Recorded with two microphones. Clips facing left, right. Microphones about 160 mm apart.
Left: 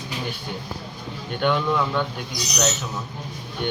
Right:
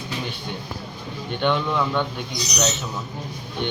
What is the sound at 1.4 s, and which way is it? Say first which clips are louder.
Speech: even; 5° left (ahead or behind).